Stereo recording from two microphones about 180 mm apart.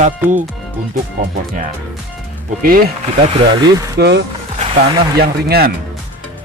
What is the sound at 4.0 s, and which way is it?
Speech, 65° right (ahead or behind).